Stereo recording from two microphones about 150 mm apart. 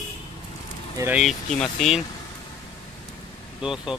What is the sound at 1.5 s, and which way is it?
Speech, 5° left (ahead or behind).